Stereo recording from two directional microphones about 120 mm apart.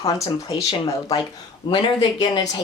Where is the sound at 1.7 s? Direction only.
40° left (ahead or behind).